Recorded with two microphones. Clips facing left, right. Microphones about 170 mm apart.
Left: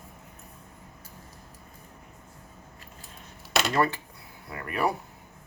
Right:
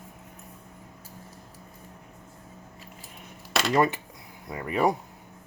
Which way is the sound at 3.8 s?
20° right (ahead or behind).